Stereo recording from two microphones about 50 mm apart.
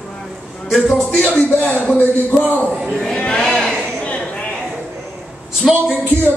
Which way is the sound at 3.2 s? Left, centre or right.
Centre.